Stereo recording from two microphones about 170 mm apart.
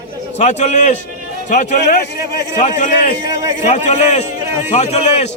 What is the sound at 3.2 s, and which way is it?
Speech, 20° right (ahead or behind).